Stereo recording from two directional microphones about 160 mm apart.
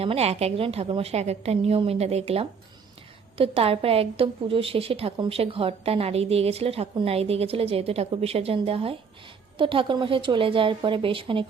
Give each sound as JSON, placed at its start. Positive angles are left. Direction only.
{"t": 0.0, "sound": "speech", "side_deg": -40}